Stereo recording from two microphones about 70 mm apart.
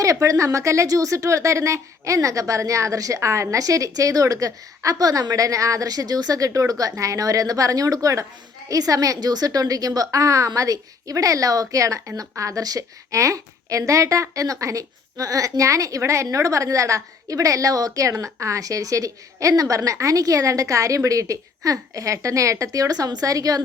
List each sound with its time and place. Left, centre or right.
0.0 s a woman's voice: right